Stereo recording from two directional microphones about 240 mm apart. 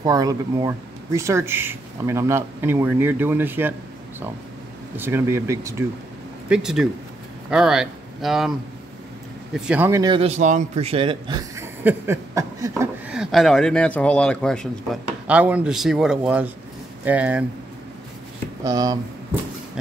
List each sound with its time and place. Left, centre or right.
0.0 s speech: centre
4.9 s speech: centre
18.6 s speech: centre